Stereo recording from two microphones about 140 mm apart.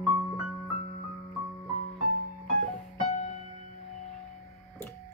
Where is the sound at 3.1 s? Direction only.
55° left (ahead or behind).